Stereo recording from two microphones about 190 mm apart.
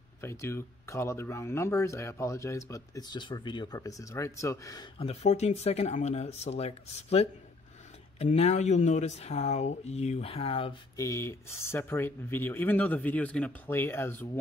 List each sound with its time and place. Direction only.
0.2 s speech: 15° left (ahead or behind)
4.9 s speech: 30° left (ahead or behind)
11.0 s speech: 15° left (ahead or behind)